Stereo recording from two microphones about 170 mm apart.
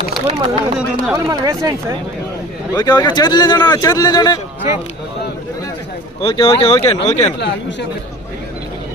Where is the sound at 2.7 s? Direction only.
20° left (ahead or behind).